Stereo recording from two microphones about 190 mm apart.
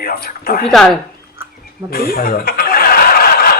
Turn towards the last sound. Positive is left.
turn(degrees=50)  # may be behind; listen again after turning